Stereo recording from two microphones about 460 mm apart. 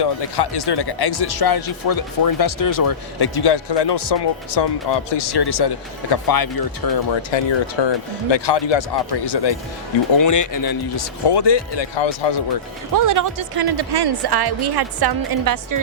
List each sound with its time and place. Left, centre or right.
0.0 s speech: left
7.2 s speech: left
10.2 s speech: left
12.9 s a woman's voice: right